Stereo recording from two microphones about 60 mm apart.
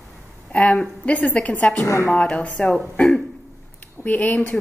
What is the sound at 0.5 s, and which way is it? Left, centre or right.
Speech, left.